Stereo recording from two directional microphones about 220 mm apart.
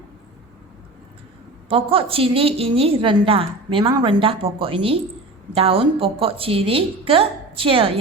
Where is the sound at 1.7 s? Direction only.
25° right (ahead or behind).